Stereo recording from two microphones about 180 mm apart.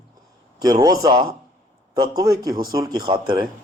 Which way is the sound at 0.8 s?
20° right (ahead or behind).